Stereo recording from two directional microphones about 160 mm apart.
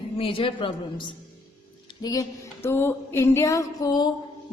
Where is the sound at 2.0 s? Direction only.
20° left (ahead or behind).